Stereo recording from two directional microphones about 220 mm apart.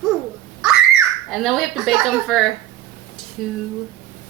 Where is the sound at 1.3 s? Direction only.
Centre (ahead or behind).